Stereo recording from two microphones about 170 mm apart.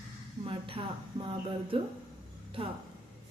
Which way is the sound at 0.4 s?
30° right (ahead or behind).